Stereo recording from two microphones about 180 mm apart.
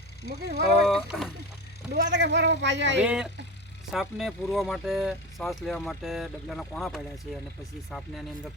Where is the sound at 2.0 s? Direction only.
80° right.